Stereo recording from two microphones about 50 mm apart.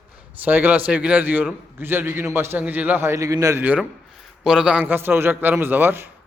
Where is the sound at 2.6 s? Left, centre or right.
Right.